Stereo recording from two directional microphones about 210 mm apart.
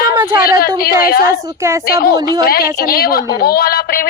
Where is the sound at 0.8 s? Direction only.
45° left (ahead or behind).